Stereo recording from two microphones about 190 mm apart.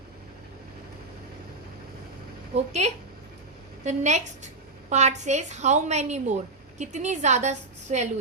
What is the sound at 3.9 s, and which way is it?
A woman's voice, 40° right (ahead or behind).